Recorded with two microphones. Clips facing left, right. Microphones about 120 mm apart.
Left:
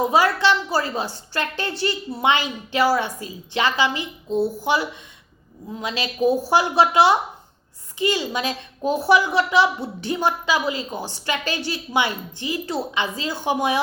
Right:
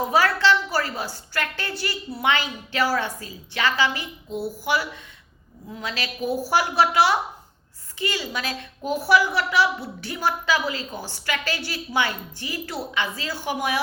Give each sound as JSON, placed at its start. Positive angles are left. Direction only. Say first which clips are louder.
{"t": 0.0, "sound": "a woman's voice", "louder": "left 2 dB", "side_deg": 15}